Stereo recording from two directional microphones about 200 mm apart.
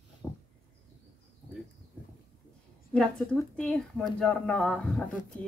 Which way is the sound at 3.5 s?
Centre (ahead or behind).